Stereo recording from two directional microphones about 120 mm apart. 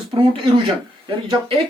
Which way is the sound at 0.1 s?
50° right (ahead or behind).